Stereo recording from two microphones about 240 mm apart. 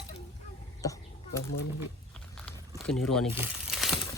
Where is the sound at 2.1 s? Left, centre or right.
Centre.